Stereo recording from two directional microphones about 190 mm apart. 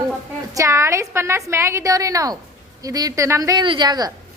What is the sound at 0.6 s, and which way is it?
A woman's voice, 15° right (ahead or behind).